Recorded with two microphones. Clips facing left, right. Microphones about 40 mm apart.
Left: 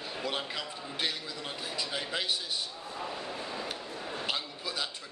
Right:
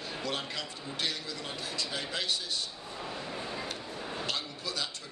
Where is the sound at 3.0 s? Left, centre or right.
Centre.